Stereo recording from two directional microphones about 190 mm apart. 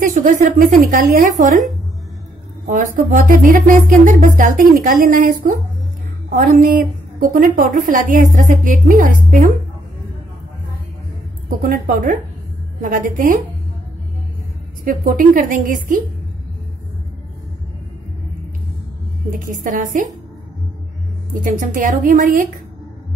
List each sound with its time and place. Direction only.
0.0 s a woman's voice: 45° right (ahead or behind)
2.6 s a woman's voice: 45° right (ahead or behind)
11.6 s a woman's voice: 45° right (ahead or behind)
14.9 s a woman's voice: 45° right (ahead or behind)
19.4 s a woman's voice: 45° right (ahead or behind)
21.3 s a woman's voice: 45° right (ahead or behind)